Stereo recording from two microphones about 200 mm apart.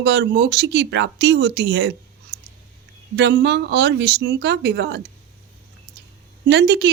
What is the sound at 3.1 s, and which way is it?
Speech, 60° right (ahead or behind).